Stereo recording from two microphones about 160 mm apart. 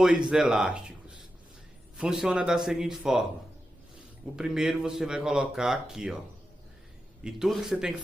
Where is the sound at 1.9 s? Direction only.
5° right (ahead or behind).